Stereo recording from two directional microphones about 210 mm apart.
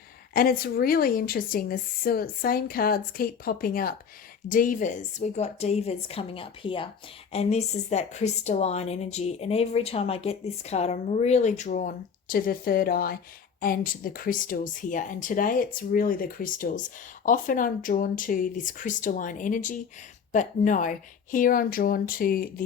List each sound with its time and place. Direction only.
0.3 s a woman's voice: 45° left (ahead or behind)